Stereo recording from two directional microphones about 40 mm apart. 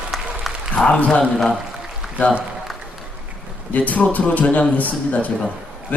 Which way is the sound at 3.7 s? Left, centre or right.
Left.